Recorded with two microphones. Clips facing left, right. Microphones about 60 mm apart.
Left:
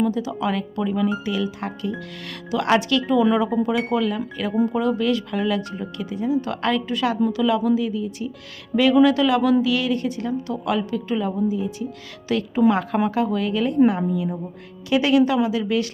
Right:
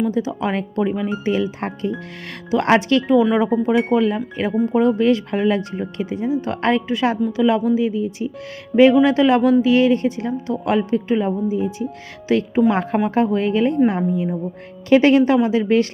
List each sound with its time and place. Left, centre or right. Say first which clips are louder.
0.0 s a woman's voice: right 2 dB; right